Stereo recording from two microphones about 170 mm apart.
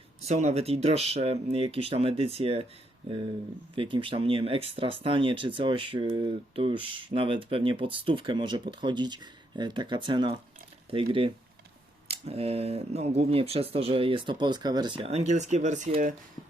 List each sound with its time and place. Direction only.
0.3 s speech: 40° right (ahead or behind)
3.8 s speech: 30° right (ahead or behind); by 16.1 s 50° right (ahead or behind)